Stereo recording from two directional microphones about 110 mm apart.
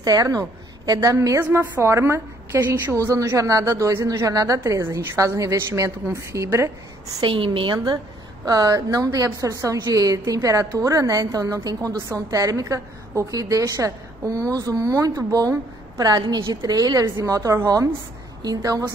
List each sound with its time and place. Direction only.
0.0 s a woman's voice: 35° right (ahead or behind)
1.4 s a woman's voice: 20° right (ahead or behind)
7.2 s a woman's voice: 50° right (ahead or behind)
8.5 s a woman's voice: 35° right (ahead or behind)